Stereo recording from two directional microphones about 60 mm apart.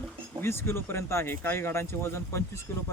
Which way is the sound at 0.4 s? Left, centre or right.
Left.